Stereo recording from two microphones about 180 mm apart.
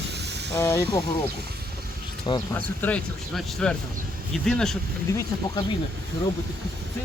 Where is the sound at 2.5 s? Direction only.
10° left (ahead or behind).